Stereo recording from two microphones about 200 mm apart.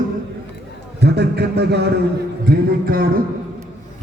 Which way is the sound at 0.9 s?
55° right (ahead or behind).